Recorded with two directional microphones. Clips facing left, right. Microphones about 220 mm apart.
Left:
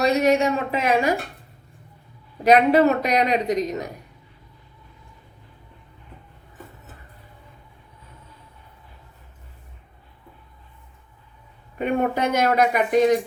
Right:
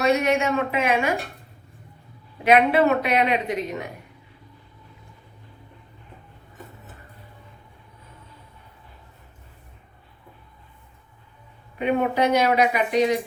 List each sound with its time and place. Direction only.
0.0 s a man's voice: 35° left (ahead or behind)
2.4 s a man's voice: 40° left (ahead or behind)
11.8 s speech: 45° left (ahead or behind)